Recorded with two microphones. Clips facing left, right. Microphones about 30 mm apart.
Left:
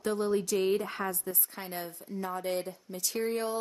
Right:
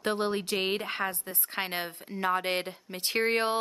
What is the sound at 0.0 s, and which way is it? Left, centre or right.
Speech, right.